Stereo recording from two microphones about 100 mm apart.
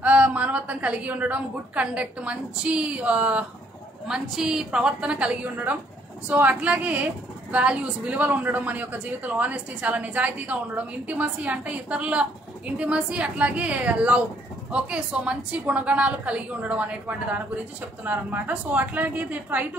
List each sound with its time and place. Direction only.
0.0 s a woman's voice: 15° right (ahead or behind)